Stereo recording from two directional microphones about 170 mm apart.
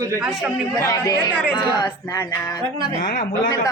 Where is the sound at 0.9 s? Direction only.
20° left (ahead or behind).